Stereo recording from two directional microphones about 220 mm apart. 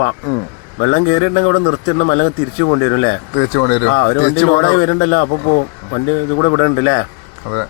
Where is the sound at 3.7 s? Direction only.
55° left (ahead or behind).